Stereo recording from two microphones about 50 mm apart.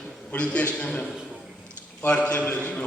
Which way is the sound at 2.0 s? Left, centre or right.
Left.